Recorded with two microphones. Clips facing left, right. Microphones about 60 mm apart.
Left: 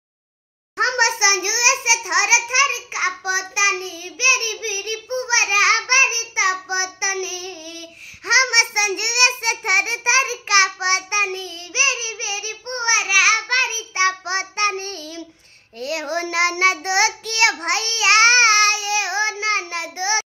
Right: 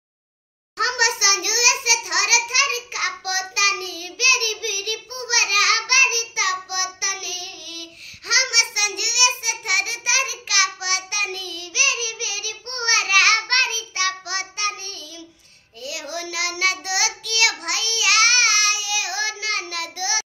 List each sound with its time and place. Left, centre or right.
0.7 s a sound: left
8.3 s a child's voice: left; by 13.7 s centre
13.7 s child singing: left